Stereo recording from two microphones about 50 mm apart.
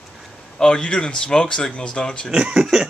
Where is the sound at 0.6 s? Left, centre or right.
Centre.